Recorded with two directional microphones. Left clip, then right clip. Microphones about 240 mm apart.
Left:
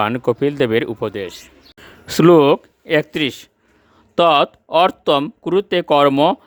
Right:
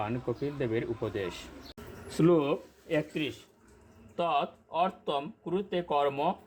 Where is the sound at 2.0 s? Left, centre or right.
Left.